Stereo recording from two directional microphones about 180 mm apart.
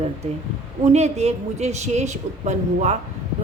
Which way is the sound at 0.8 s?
40° right (ahead or behind).